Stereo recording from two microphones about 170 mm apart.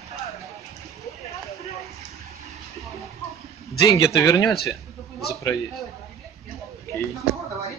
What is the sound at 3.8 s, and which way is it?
Speech, 20° left (ahead or behind).